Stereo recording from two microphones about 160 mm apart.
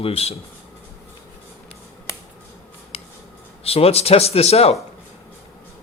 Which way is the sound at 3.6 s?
40° left (ahead or behind).